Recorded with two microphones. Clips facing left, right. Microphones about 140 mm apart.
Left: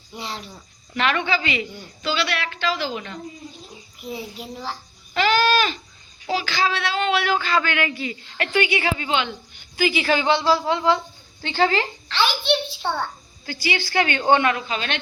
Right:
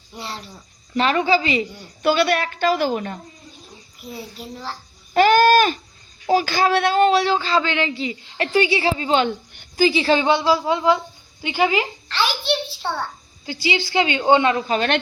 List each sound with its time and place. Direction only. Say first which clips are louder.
0.1 s a child's voice: even; centre (ahead or behind)
0.9 s speech: right 5 dB; 35° right (ahead or behind)
2.0 s a woman's voice: right 7 dB; 50° right (ahead or behind)
4.0 s a child's voice: left 2 dB; 5° right (ahead or behind)
5.1 s goat: right 6 dB; 45° right (ahead or behind)
6.2 s a woman's voice: right 5 dB; 45° right (ahead or behind); by 13.1 s 5° right (ahead or behind)
13.4 s a woman's voice: right 3 dB; 20° right (ahead or behind)
14.5 s a woman's voice: right 6 dB; 45° right (ahead or behind)